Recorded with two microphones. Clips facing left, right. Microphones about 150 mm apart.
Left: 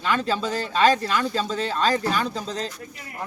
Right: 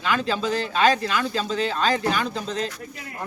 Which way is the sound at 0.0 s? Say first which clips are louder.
Even; 35° left (ahead or behind).